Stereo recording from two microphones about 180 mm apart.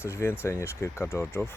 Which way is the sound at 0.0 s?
15° left (ahead or behind).